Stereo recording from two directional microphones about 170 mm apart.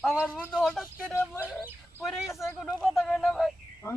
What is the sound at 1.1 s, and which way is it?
Speech, 15° left (ahead or behind).